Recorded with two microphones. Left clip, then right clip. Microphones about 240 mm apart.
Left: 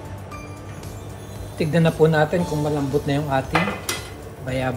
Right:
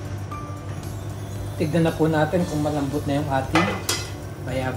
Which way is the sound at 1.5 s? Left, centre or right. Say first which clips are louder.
Left 3 dB; left.